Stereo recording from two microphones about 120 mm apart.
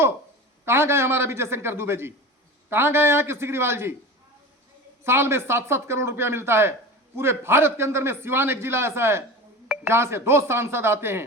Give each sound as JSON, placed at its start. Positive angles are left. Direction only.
{"t": 0.6, "sound": "a man's voice", "side_deg": -20}
{"t": 5.0, "sound": "a man's voice", "side_deg": -20}